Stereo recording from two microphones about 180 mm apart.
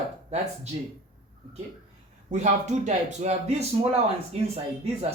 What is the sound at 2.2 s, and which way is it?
Speech, 40° right (ahead or behind).